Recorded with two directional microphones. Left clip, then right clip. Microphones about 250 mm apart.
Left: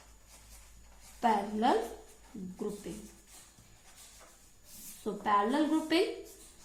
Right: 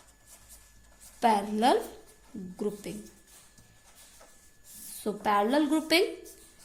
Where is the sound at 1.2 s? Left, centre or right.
Right.